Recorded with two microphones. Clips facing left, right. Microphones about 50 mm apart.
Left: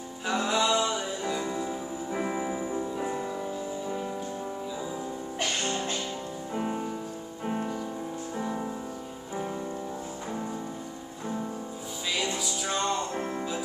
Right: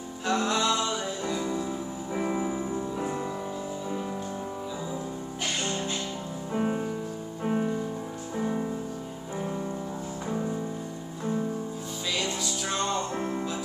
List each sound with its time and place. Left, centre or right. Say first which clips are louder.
0.3 s music: even; centre
5.6 s music: even; centre
6.5 s music: right 3 dB; centre
12.2 s music: left 1 dB; centre